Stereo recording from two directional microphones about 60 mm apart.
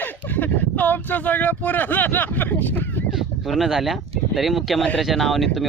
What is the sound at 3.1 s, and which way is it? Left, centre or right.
Speech, centre.